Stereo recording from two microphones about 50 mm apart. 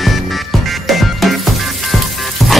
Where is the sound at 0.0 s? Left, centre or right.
Centre.